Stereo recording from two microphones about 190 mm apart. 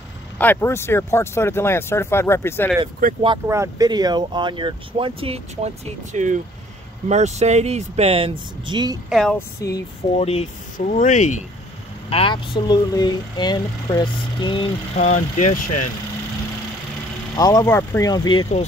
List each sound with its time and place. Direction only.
0.4 s speech: 10° left (ahead or behind)
3.0 s speech: 50° right (ahead or behind)
3.4 s speech: 15° right (ahead or behind); by 5.7 s 30° right (ahead or behind)
6.1 s speech: 40° right (ahead or behind); by 8.9 s 25° right (ahead or behind)
9.1 s a sound: centre (ahead or behind)
9.6 s speech: 20° left (ahead or behind)
10.1 s speech: 35° left (ahead or behind)
12.1 s speech: 30° left (ahead or behind)
15.0 s speech: 35° left (ahead or behind)
17.4 s speech: 20° left (ahead or behind)